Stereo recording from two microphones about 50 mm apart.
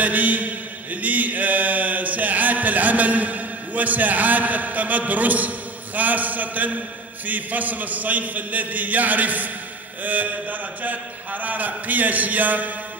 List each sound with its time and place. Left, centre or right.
0.0 s speech: right
1.0 s mantra: right
5.9 s speech: right